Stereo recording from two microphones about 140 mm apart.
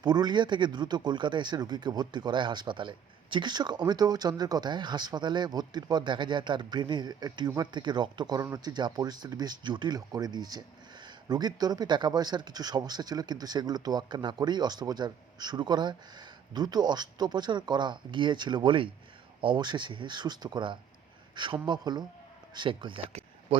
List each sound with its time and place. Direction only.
0.0 s a man's voice: 30° right (ahead or behind)